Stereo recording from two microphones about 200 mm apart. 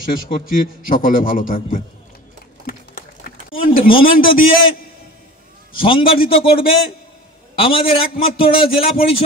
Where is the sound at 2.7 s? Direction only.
45° left (ahead or behind).